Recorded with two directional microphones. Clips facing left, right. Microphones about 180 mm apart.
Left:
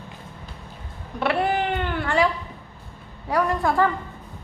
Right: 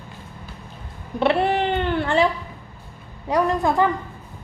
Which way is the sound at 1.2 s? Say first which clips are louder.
Right 3 dB; 25° right (ahead or behind).